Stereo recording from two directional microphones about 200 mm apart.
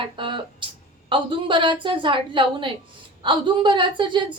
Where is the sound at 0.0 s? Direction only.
25° right (ahead or behind).